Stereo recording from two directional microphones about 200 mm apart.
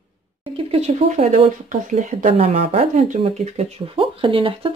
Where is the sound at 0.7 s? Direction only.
30° right (ahead or behind).